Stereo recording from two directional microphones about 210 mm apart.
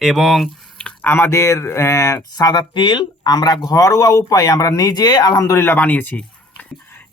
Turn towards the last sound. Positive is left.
turn(degrees=10)  # may be behind; listen again after turning